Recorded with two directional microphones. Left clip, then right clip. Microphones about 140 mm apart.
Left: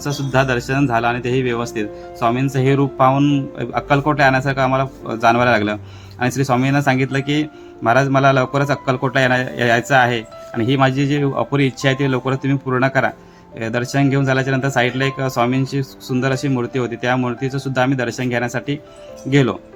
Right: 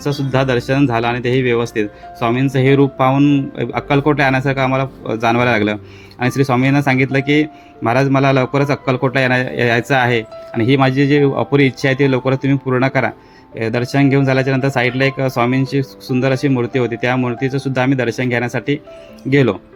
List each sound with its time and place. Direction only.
0.0 s speech: 15° right (ahead or behind)